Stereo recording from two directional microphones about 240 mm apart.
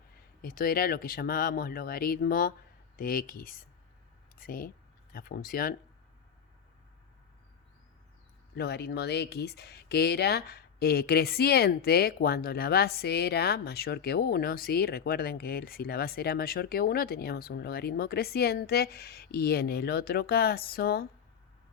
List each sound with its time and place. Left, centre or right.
0.4 s speech: left
8.5 s speech: left